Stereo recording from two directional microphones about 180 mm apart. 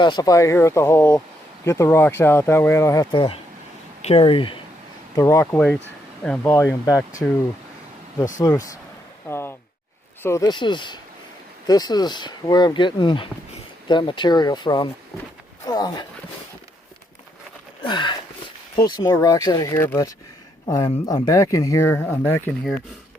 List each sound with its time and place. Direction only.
0.0 s speech: 25° left (ahead or behind)
5.1 s speech: 15° left (ahead or behind)
7.2 s speech: 5° left (ahead or behind)
9.3 s sigh: 15° left (ahead or behind)
10.2 s speech: 20° left (ahead or behind)
17.8 s speech: 25° left (ahead or behind)